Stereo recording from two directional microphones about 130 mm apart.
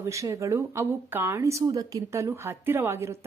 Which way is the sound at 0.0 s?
25° right (ahead or behind).